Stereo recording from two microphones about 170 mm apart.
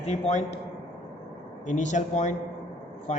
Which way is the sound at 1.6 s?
45° left (ahead or behind).